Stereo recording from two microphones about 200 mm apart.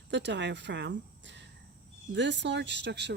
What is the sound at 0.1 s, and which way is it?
Speech, 60° right (ahead or behind).